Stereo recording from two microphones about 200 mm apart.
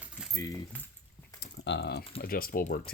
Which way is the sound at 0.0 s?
5° right (ahead or behind).